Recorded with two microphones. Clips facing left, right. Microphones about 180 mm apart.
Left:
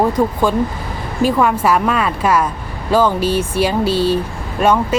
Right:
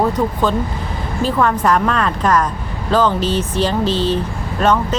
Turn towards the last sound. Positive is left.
turn(degrees=10)  # may be behind; listen again after turning